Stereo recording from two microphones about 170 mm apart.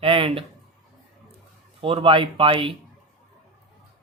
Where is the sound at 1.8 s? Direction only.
30° right (ahead or behind).